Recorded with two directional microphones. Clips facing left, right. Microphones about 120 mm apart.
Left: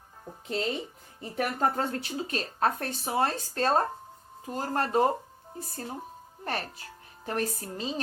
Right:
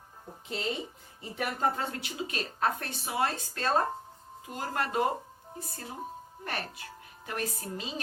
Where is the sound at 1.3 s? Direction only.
40° left (ahead or behind).